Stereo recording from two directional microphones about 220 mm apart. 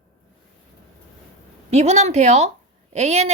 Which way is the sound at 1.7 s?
30° right (ahead or behind).